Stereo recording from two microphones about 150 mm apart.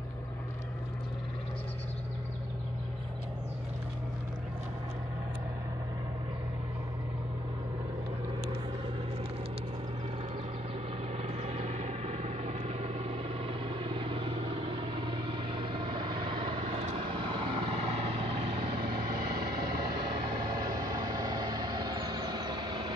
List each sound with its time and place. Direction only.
11.2 s vehicle: 45° right (ahead or behind)
20.2 s vehicle: 30° right (ahead or behind)